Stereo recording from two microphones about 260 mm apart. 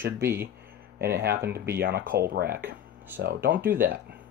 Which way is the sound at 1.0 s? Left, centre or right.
Right.